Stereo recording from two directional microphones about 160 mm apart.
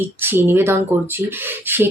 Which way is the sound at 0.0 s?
15° right (ahead or behind).